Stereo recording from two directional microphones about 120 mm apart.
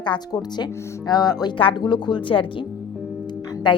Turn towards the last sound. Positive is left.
turn(degrees=40)  # may be behind; listen again after turning